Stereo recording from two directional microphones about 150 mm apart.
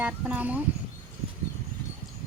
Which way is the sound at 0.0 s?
10° right (ahead or behind).